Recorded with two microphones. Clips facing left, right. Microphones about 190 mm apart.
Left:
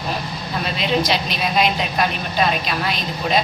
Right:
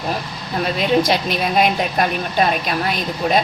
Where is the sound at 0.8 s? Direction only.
50° right (ahead or behind).